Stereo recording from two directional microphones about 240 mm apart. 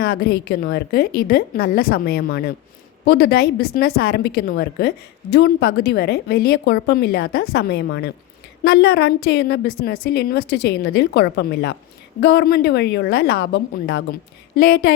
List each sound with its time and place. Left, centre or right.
0.0 s a woman's voice: left